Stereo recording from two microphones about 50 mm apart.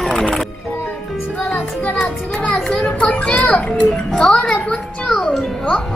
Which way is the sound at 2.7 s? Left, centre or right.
Left.